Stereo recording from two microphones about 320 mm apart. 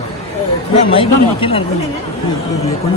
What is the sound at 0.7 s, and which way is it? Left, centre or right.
Speech, centre.